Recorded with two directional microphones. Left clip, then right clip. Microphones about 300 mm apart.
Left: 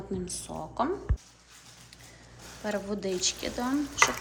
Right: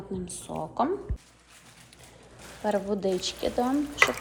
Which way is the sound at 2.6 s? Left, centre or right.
Centre.